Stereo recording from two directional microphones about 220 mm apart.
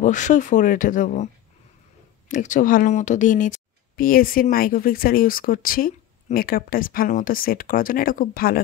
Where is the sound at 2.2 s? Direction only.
35° left (ahead or behind).